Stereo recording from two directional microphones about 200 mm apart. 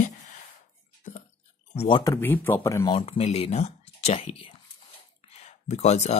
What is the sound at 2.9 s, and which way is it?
Speech, 30° left (ahead or behind).